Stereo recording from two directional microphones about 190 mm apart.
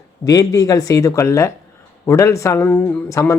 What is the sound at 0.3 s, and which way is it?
Speech, 20° left (ahead or behind).